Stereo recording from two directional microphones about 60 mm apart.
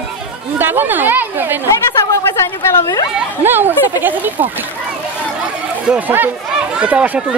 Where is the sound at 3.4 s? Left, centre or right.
Right.